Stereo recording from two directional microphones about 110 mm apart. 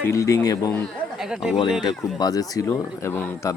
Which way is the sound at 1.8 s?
40° left (ahead or behind).